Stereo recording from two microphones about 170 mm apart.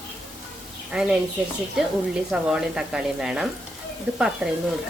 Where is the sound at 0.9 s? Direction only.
5° right (ahead or behind).